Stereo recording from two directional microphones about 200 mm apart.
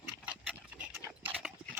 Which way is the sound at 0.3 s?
5° right (ahead or behind).